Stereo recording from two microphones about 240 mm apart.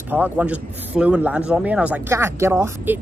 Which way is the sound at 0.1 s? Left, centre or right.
Centre.